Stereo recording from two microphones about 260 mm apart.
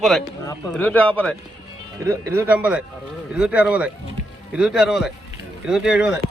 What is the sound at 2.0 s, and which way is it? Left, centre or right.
Speech, centre.